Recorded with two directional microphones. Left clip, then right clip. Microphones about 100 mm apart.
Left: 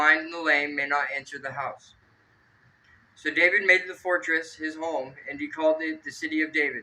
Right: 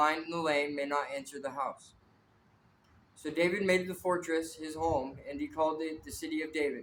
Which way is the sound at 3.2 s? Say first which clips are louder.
Left 9 dB; 60° right (ahead or behind).